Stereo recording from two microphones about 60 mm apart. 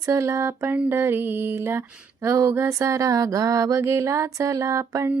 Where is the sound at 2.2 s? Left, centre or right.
Right.